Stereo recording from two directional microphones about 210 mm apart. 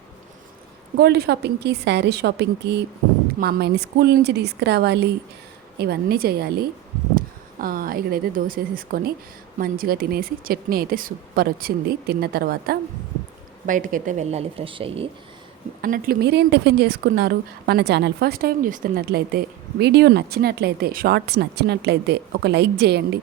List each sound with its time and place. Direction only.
0.9 s a woman's voice: 50° right (ahead or behind); by 15.1 s 25° right (ahead or behind)
15.8 s a woman's voice: 45° right (ahead or behind)